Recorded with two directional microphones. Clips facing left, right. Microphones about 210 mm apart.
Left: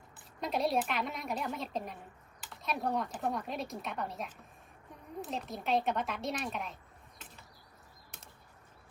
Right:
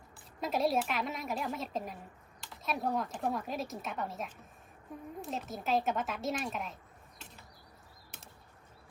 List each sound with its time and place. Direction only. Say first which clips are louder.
0.2 s speech: right 1 dB; centre (ahead or behind)